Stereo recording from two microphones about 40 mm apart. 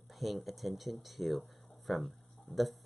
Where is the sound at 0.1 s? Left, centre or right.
Centre.